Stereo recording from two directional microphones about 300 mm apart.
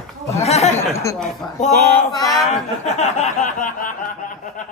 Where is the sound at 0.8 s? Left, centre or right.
Centre.